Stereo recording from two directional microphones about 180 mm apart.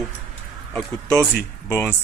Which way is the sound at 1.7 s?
10° left (ahead or behind).